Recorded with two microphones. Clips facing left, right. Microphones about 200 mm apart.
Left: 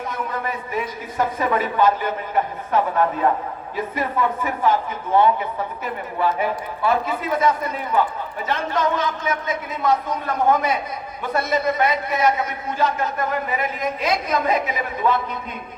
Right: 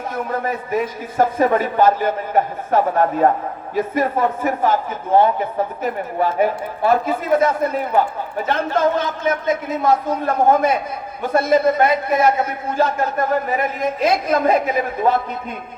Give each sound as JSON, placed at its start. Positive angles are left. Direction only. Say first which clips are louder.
{"t": 0.3, "sound": "a man's voice", "louder": "right 5 dB", "side_deg": -45}